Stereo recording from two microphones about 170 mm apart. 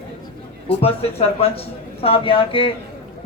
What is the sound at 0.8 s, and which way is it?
Speech, 35° left (ahead or behind).